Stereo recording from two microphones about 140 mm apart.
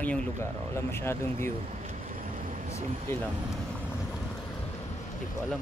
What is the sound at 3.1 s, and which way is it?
Speech, 20° left (ahead or behind).